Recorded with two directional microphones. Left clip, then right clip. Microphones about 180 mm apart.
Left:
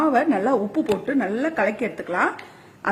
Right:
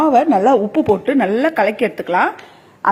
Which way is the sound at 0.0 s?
25° right (ahead or behind).